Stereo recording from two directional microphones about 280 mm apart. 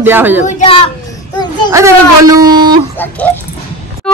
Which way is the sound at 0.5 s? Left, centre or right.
Left.